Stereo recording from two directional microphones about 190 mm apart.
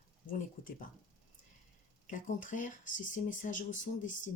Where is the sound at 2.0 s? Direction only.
45° left (ahead or behind).